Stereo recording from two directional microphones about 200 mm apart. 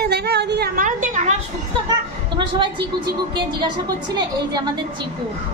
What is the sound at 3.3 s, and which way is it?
Speech, 25° right (ahead or behind).